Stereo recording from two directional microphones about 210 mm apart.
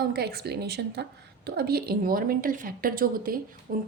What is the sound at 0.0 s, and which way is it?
A woman's voice, 50° right (ahead or behind).